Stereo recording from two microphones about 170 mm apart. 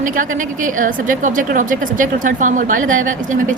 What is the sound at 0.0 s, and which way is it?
A woman's voice, 50° right (ahead or behind).